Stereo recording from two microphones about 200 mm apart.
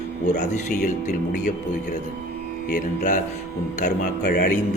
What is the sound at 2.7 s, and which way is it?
Speech, 45° left (ahead or behind).